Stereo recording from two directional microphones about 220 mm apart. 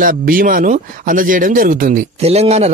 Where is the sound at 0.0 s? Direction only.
40° right (ahead or behind).